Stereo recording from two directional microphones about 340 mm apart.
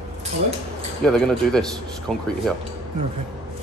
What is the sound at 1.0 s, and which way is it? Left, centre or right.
A man's voice, centre.